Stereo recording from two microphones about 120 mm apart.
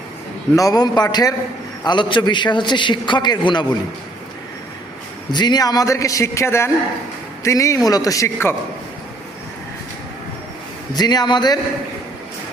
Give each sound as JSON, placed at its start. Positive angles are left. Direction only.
{"t": 0.5, "sound": "a man's voice", "side_deg": 30}
{"t": 5.3, "sound": "a man's voice", "side_deg": 35}
{"t": 10.9, "sound": "a man's voice", "side_deg": 35}